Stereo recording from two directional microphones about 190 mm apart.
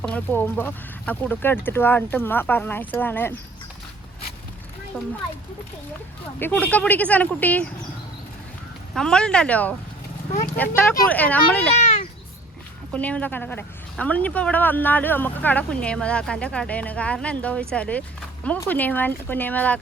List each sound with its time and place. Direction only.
0.0 s speech: 10° left (ahead or behind)
6.4 s speech: 10° left (ahead or behind)
9.0 s speech: 5° left (ahead or behind)
11.7 s a sound: 35° left (ahead or behind)
12.9 s speech: 5° left (ahead or behind)